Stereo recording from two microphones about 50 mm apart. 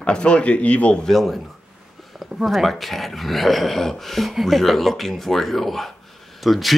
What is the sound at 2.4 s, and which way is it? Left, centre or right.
Speech, centre.